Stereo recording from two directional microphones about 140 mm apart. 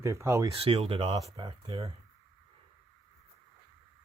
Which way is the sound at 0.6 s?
45° right (ahead or behind).